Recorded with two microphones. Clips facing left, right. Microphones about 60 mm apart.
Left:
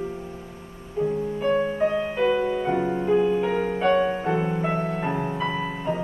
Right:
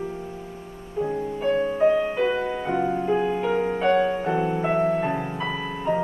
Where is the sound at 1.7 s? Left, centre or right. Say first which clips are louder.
Right 3 dB; centre.